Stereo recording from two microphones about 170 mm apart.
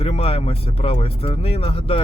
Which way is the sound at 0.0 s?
35° left (ahead or behind).